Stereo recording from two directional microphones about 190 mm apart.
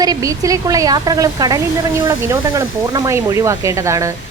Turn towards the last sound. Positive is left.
turn(degrees=-15)  # may be behind; listen again after turning